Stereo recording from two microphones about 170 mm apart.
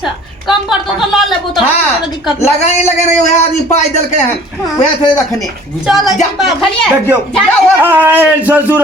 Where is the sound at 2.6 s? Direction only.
40° left (ahead or behind).